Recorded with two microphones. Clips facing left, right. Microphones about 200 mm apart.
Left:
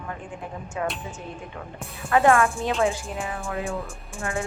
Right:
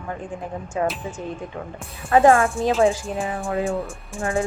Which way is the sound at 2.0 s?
30° right (ahead or behind).